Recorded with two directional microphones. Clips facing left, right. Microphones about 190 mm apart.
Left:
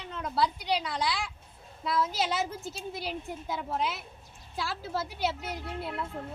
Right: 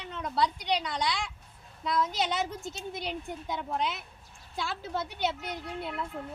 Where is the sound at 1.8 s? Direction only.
5° left (ahead or behind).